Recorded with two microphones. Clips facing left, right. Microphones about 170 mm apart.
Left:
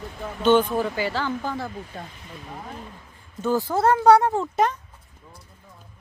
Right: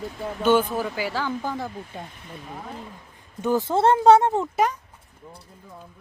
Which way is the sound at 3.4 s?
20° right (ahead or behind).